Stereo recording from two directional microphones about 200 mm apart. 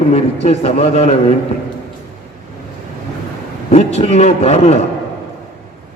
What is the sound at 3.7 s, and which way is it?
A man's voice, 35° left (ahead or behind).